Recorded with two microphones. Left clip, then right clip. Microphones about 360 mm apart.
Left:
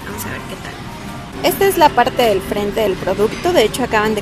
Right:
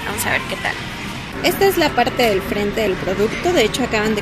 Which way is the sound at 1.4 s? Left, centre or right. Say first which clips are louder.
Left 3 dB; centre.